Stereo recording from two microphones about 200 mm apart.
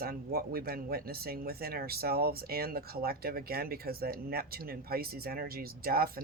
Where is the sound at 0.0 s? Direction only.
50° right (ahead or behind).